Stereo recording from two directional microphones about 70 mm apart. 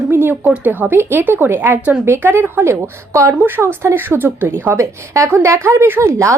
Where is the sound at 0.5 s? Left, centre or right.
Right.